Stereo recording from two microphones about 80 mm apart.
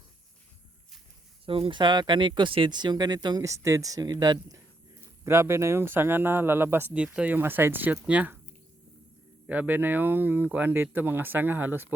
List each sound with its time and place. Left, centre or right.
1.5 s speech: right
3.4 s speech: right
5.2 s speech: right
6.9 s speech: centre
9.5 s speech: right